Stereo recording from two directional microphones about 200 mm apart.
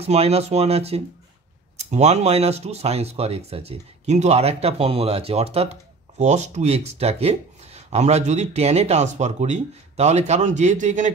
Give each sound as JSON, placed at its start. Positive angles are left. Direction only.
{"t": 0.0, "sound": "speech", "side_deg": -30}